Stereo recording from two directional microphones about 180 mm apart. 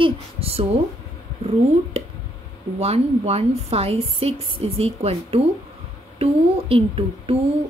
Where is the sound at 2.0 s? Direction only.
35° right (ahead or behind).